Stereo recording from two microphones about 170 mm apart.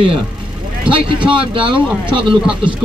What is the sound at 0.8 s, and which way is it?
Speech, 30° right (ahead or behind).